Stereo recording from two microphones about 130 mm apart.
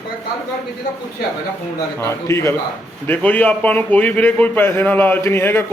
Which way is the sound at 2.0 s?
20° left (ahead or behind).